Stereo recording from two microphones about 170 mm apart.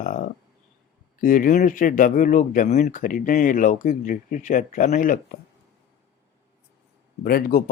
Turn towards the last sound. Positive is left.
turn(degrees=60)  # may be behind; listen again after turning